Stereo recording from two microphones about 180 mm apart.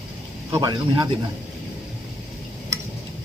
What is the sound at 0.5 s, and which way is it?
Speech, 20° right (ahead or behind).